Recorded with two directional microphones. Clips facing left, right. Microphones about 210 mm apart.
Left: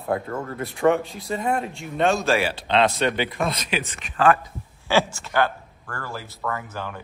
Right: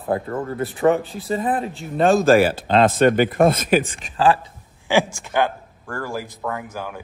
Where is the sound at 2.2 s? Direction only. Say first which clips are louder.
Right 8 dB; 50° right (ahead or behind).